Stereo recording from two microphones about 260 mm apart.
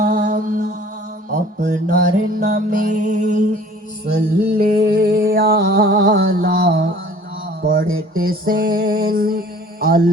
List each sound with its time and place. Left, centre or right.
0.0 s mantra: right
1.3 s music: right